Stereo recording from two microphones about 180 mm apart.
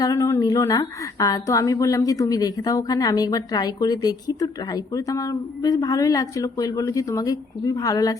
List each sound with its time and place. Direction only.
0.0 s a woman's voice: 20° left (ahead or behind)